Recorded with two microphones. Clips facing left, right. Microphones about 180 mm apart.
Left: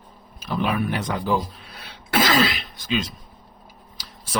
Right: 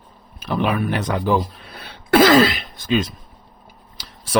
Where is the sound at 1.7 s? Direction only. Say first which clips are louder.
Right 8 dB; 60° right (ahead or behind).